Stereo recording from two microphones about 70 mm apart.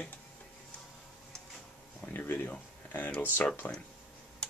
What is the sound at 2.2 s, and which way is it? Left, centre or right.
Speech, left.